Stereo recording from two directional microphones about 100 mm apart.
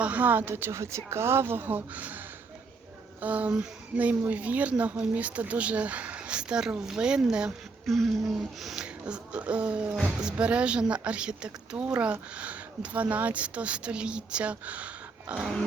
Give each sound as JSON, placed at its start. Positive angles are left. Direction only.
{"t": 0.0, "sound": "a woman's voice", "side_deg": -15}
{"t": 3.2, "sound": "a woman's voice", "side_deg": -15}
{"t": 7.9, "sound": "a sound", "side_deg": 0}
{"t": 10.2, "sound": "a woman's voice", "side_deg": -10}